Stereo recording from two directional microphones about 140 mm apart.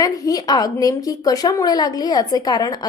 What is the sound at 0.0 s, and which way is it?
A woman's voice, 25° left (ahead or behind).